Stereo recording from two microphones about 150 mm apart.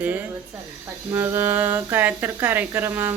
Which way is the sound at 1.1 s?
15° right (ahead or behind).